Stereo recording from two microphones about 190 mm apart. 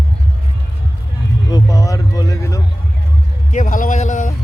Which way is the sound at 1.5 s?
15° left (ahead or behind).